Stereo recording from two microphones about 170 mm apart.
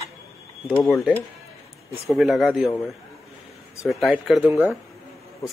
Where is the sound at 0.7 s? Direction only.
10° left (ahead or behind).